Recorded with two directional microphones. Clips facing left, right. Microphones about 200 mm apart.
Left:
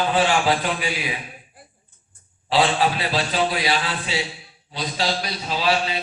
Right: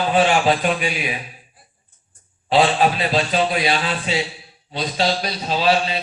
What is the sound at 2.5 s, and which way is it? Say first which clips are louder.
Speech: right 3 dB; 25° right (ahead or behind).